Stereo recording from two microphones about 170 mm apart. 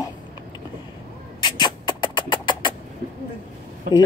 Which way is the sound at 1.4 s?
25° left (ahead or behind).